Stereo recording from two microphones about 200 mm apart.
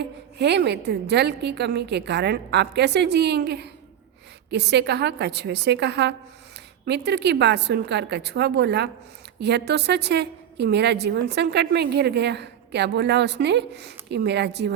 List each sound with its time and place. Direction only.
0.0 s a woman's voice: 55° right (ahead or behind)